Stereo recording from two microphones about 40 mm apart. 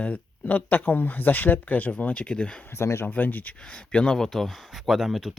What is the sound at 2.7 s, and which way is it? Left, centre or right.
Speech, left.